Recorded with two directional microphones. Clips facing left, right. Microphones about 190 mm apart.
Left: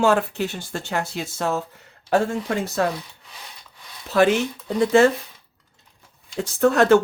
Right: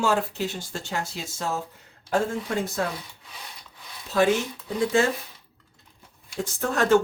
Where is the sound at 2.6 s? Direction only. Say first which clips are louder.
Left 5 dB; 75° left (ahead or behind).